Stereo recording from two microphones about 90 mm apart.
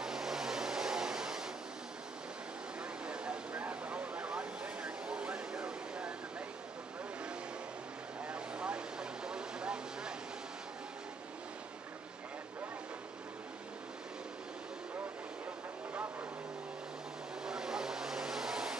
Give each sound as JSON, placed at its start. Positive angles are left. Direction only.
{"t": 0.0, "sound": "vehicle", "side_deg": -5}
{"t": 3.1, "sound": "a sound", "side_deg": -10}
{"t": 8.3, "sound": "vehicle", "side_deg": -10}
{"t": 17.5, "sound": "vehicle", "side_deg": -5}